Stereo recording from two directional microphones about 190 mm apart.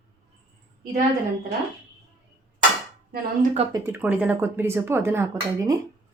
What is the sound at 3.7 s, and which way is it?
Speech, 10° right (ahead or behind).